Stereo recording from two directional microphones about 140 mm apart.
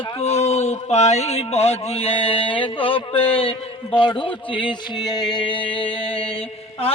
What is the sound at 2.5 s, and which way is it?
Speech, 40° left (ahead or behind).